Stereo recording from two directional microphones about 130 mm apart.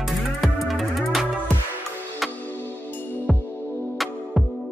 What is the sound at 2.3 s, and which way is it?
Music, 15° left (ahead or behind).